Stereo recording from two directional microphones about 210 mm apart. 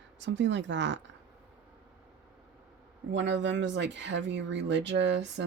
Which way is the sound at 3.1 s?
60° right (ahead or behind).